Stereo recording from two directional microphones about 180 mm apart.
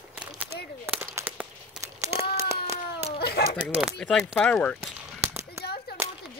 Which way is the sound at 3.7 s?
Centre (ahead or behind).